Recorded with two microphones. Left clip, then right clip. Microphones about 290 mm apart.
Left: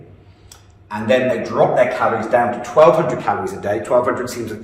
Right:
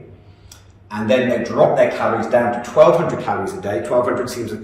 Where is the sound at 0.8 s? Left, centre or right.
Centre.